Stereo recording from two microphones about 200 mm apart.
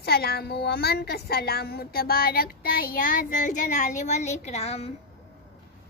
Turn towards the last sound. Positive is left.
turn(degrees=30)  # may be behind; listen again after turning